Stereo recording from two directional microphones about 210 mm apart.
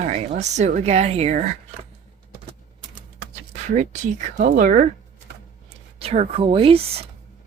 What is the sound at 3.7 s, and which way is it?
A woman's voice, 35° right (ahead or behind).